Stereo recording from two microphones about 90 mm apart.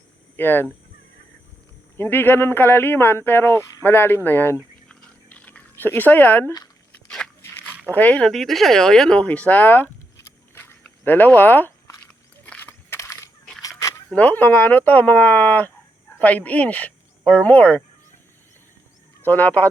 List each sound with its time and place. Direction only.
0.3 s speech: 25° left (ahead or behind)
2.0 s speech: 25° left (ahead or behind)
4.9 s chewing: 10° left (ahead or behind)
7.9 s speech: 15° left (ahead or behind)
8.3 s speech: centre (ahead or behind); by 11.7 s 20° left (ahead or behind)
12.4 s a sound: 15° left (ahead or behind)
12.9 s crushing: 35° left (ahead or behind)
13.6 s a sound: 40° left (ahead or behind)
14.2 s speech: 20° left (ahead or behind)
19.2 s speech: 20° left (ahead or behind)